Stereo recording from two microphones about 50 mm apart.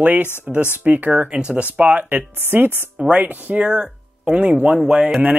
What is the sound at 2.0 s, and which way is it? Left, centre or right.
Speech, right.